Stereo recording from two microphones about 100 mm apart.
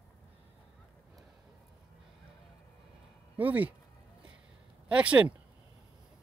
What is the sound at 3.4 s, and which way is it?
Speech, 15° right (ahead or behind).